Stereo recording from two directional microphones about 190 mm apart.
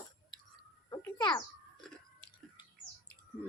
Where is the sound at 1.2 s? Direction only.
20° left (ahead or behind).